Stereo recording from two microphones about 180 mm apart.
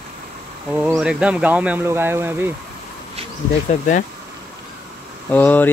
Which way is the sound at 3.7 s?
40° left (ahead or behind).